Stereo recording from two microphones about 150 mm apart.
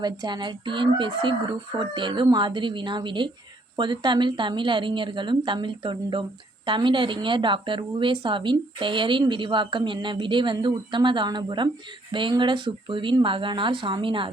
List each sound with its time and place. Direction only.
0.0 s a woman's voice: 30° right (ahead or behind)